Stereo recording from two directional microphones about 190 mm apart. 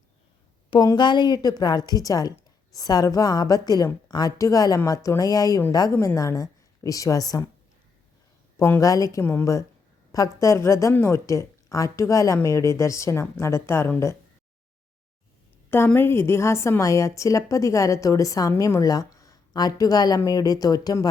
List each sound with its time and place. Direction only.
0.7 s a woman's voice: 25° left (ahead or behind)
8.5 s a woman's voice: 15° left (ahead or behind)
15.7 s a woman's voice: 10° left (ahead or behind)